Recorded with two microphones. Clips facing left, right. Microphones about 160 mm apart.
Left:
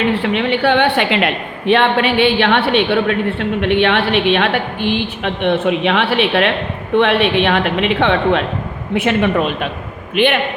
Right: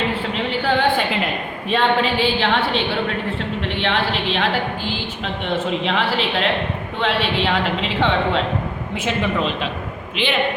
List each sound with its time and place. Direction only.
0.2 s a woman's voice: 70° left (ahead or behind); by 10.3 s 55° left (ahead or behind)